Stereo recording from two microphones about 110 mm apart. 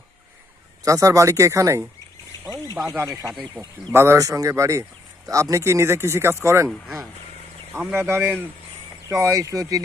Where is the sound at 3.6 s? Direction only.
5° left (ahead or behind).